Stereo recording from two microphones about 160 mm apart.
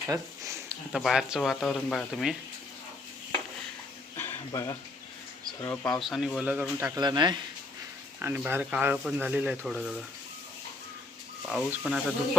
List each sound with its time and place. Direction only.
0.1 s a sound: 20° right (ahead or behind)
0.9 s speech: centre (ahead or behind)
4.2 s a sound: 15° left (ahead or behind)
5.6 s speech: 20° left (ahead or behind)
6.0 s speech: centre (ahead or behind); by 7.3 s 25° right (ahead or behind)
8.2 s speech: 15° right (ahead or behind)
11.4 s speech: centre (ahead or behind)